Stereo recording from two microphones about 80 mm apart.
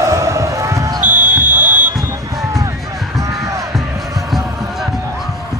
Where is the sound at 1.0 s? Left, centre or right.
Centre.